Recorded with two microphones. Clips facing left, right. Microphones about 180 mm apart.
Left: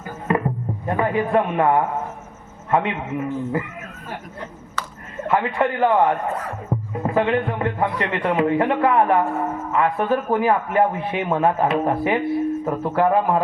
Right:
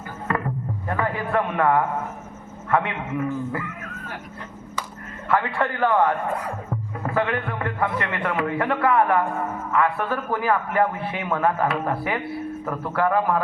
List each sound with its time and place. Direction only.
0.3 s a sound: 20° left (ahead or behind)
0.9 s a man's voice: 15° left (ahead or behind)
5.3 s a man's voice: 15° left (ahead or behind)